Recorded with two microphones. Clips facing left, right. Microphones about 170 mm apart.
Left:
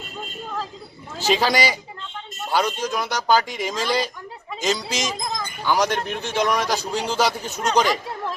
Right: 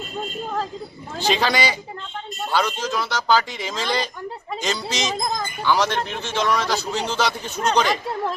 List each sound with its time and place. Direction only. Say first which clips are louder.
1.3 s a man's voice: left 1 dB; 10° left (ahead or behind)
5.1 s speech: right 4 dB; 35° right (ahead or behind)
5.6 s a man's voice: even; 15° left (ahead or behind)